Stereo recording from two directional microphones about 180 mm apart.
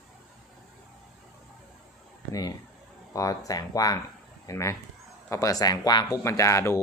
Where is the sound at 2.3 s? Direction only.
20° left (ahead or behind).